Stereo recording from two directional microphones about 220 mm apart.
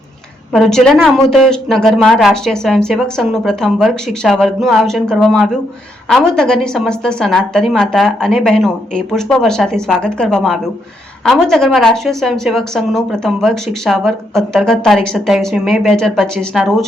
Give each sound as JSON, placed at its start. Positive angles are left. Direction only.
{"t": 0.5, "sound": "speech", "side_deg": 0}